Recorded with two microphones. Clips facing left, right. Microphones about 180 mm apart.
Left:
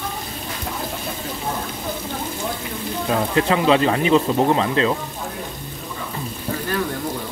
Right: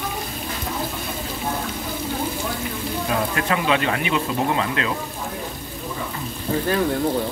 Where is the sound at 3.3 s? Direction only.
30° left (ahead or behind).